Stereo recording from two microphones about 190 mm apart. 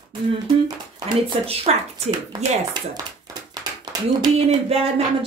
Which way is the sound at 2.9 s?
20° right (ahead or behind).